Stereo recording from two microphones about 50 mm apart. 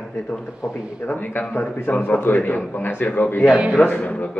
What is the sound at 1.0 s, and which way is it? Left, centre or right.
A man's voice, left.